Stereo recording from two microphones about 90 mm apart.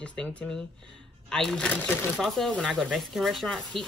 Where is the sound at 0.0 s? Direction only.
10° left (ahead or behind).